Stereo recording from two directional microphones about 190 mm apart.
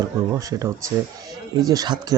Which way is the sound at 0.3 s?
15° right (ahead or behind).